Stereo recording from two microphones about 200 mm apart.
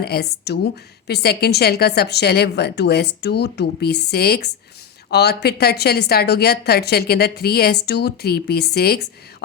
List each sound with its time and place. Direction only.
0.0 s a woman's voice: 50° left (ahead or behind)